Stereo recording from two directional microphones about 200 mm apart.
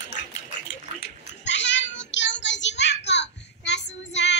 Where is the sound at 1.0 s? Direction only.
65° left (ahead or behind).